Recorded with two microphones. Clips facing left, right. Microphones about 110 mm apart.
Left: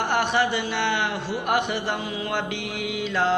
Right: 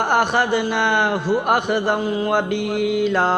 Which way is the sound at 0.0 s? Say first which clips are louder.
Right 4 dB; 45° right (ahead or behind).